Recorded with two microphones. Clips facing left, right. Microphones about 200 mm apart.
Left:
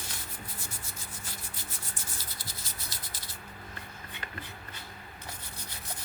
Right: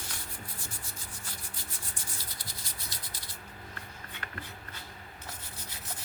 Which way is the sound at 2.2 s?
5° left (ahead or behind).